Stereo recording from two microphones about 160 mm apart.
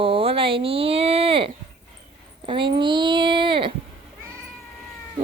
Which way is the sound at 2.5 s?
30° right (ahead or behind).